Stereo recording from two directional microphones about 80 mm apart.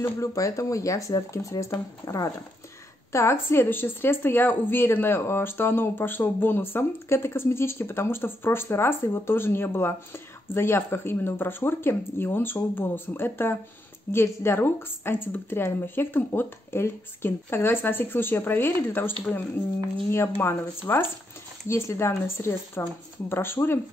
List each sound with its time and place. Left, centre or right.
0.2 s speech: left
20.9 s speech: left